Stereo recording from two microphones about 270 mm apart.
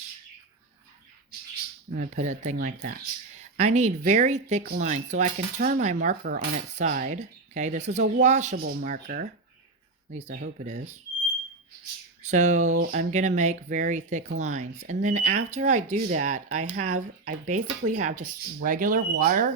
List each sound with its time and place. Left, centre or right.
2.0 s speech: right
12.2 s speech: right